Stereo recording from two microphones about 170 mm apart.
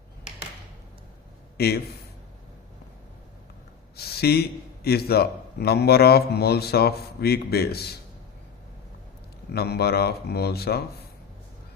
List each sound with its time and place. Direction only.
1.5 s a man's voice: 70° left (ahead or behind)
3.9 s a man's voice: 70° left (ahead or behind)
9.5 s a man's voice: 70° left (ahead or behind)